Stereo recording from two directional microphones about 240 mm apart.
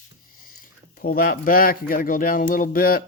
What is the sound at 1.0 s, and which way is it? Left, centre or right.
Speech, left.